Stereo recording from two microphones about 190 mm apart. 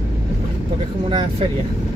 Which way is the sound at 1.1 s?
25° right (ahead or behind).